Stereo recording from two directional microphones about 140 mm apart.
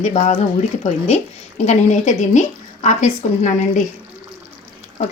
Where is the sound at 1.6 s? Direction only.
55° left (ahead or behind).